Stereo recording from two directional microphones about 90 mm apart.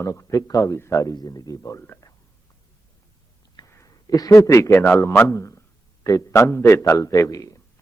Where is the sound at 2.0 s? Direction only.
40° left (ahead or behind).